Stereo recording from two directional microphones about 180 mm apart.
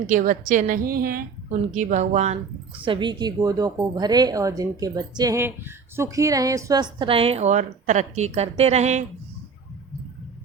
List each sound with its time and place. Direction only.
0.1 s a woman's voice: 45° right (ahead or behind)
1.7 s speech: 40° right (ahead or behind)